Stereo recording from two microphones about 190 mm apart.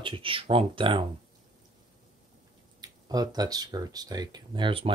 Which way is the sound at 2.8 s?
20° right (ahead or behind).